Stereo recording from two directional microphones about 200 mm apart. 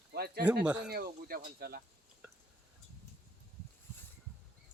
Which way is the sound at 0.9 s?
50° right (ahead or behind).